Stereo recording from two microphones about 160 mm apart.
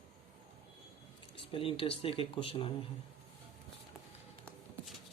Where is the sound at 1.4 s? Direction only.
35° left (ahead or behind).